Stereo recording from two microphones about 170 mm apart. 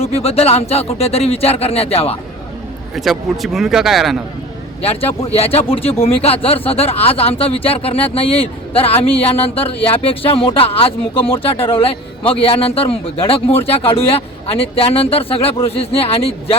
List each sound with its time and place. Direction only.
0.0 s speech: 35° left (ahead or behind)
2.9 s a man's voice: centre (ahead or behind)
4.8 s speech: 35° left (ahead or behind)